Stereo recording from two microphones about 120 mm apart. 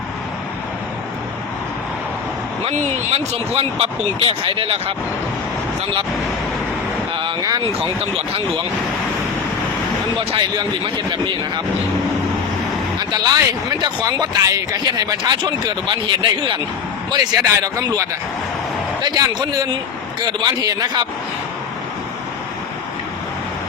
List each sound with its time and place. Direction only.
2.6 s speech: 70° right (ahead or behind)
3.3 s speech: 55° right (ahead or behind)
7.2 s a sound: 40° right (ahead or behind)
10.2 s speech: 45° right (ahead or behind)
13.0 s speech: 35° right (ahead or behind)
17.1 s speech: 35° right (ahead or behind)